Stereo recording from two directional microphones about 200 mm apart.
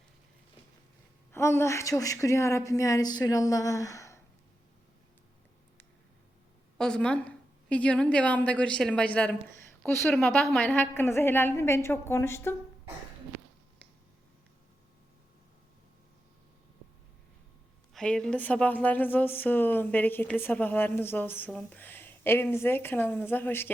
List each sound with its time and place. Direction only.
1.3 s speech: 15° left (ahead or behind)
6.7 s a woman's voice: 5° left (ahead or behind)
17.9 s speech: 5° left (ahead or behind)